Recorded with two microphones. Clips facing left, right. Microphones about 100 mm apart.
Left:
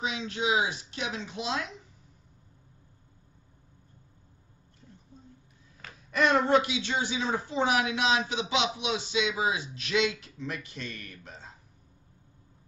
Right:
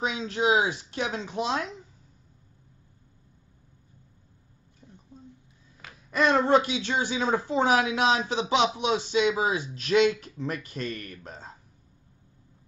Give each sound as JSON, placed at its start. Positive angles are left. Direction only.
{"t": 0.0, "sound": "a woman's voice", "side_deg": -45}
{"t": 6.1, "sound": "a woman's voice", "side_deg": -35}